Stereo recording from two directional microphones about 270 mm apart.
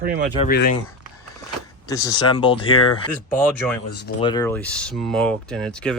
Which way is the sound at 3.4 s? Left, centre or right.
Centre.